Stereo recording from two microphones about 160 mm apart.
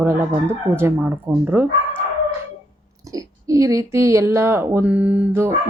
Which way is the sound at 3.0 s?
20° right (ahead or behind).